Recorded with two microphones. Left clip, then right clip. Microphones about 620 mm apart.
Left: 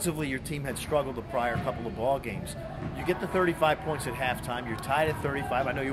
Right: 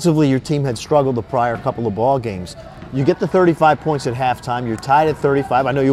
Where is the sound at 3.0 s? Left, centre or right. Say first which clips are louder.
Right 13 dB; right.